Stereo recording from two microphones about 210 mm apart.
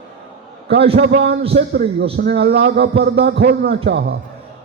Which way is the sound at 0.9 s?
55° right (ahead or behind).